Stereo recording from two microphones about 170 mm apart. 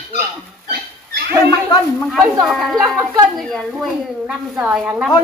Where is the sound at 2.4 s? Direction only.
Centre (ahead or behind).